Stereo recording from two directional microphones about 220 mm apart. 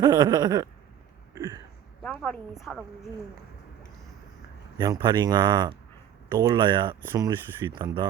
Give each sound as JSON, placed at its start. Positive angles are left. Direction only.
{"t": 0.0, "sound": "a sound", "side_deg": -20}
{"t": 1.4, "sound": "speech", "side_deg": -15}
{"t": 2.0, "sound": "a woman's voice", "side_deg": 5}
{"t": 4.8, "sound": "speech", "side_deg": -20}